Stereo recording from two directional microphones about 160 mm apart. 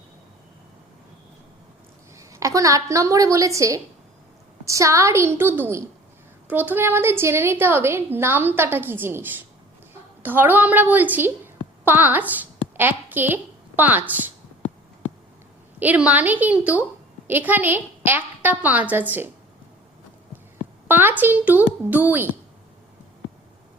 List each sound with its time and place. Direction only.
2.1 s a woman's voice: 20° right (ahead or behind)
15.8 s a woman's voice: 10° right (ahead or behind)
20.8 s speech: 10° right (ahead or behind)